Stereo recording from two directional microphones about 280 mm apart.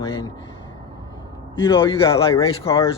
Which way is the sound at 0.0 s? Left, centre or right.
Centre.